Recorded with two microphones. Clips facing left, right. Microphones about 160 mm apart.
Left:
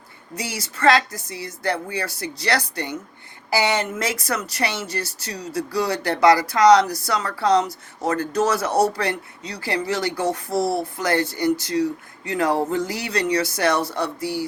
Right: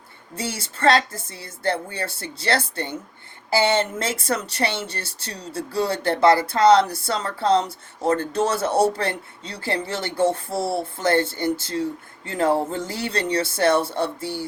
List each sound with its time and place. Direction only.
0.3 s speech: 25° right (ahead or behind)